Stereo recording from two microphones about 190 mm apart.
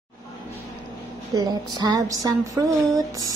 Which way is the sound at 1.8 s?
20° right (ahead or behind).